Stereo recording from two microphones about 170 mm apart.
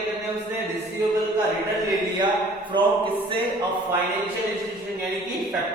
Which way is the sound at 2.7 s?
30° right (ahead or behind).